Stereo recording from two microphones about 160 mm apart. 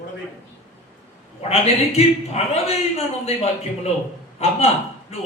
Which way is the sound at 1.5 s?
40° left (ahead or behind).